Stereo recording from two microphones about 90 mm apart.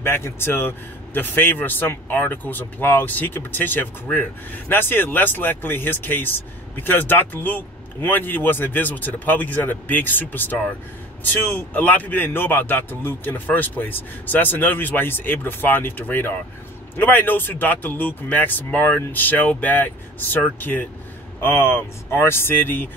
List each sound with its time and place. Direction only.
0.0 s a man's voice: 25° left (ahead or behind)